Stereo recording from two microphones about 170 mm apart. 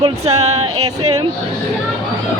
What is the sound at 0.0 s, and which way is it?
Music, 40° right (ahead or behind).